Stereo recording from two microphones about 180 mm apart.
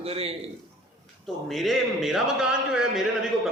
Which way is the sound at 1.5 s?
Centre (ahead or behind).